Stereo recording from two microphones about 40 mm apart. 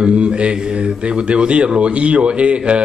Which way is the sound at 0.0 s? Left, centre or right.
Right.